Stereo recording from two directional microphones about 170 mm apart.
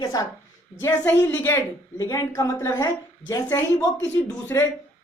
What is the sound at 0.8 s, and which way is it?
Speech, 15° left (ahead or behind).